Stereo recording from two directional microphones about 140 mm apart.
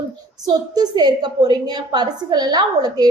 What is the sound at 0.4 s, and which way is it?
A woman's voice, 30° right (ahead or behind).